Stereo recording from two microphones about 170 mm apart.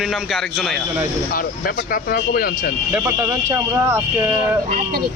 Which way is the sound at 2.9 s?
15° right (ahead or behind).